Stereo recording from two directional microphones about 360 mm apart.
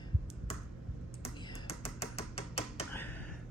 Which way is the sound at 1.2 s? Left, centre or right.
Centre.